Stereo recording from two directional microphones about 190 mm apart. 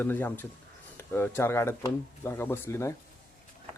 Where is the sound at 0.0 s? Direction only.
10° left (ahead or behind).